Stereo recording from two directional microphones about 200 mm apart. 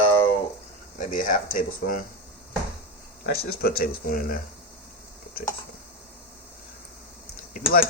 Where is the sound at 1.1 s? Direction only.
40° left (ahead or behind).